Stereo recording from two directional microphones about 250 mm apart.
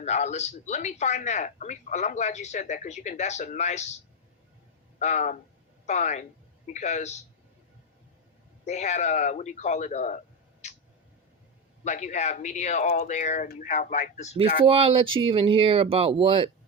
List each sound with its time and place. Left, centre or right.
0.0 s speech: left
4.9 s speech: left
8.6 s speech: left
10.6 s mouse: left
11.9 s speech: left
14.7 s speech: right